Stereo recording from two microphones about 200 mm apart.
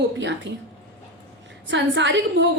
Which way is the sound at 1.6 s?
65° right (ahead or behind).